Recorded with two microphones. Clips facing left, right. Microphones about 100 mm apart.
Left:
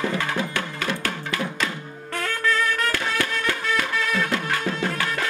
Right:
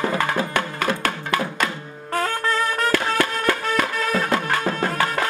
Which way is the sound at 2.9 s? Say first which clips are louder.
Right 5 dB; 50° right (ahead or behind).